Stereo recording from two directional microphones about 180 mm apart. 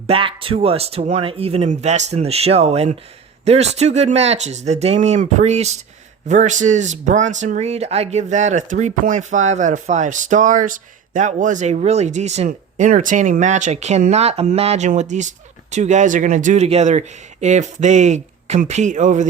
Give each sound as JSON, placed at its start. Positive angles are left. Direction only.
{"t": 0.1, "sound": "speech", "side_deg": -30}